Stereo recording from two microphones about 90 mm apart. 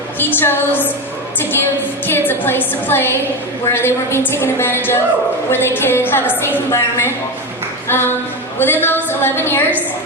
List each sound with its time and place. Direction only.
0.3 s a woman's voice: 25° left (ahead or behind)
1.4 s music: 25° left (ahead or behind)
2.0 s a woman's voice: 25° left (ahead or behind)
7.9 s a sound: 25° left (ahead or behind)
8.5 s a woman's voice: 25° left (ahead or behind)